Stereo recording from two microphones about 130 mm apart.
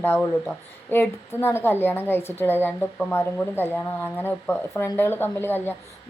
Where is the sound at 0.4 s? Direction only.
20° left (ahead or behind).